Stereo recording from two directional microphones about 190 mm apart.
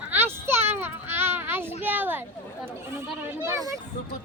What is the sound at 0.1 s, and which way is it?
Children playing, 10° right (ahead or behind).